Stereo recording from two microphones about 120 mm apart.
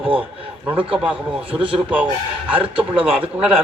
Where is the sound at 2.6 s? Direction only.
50° right (ahead or behind).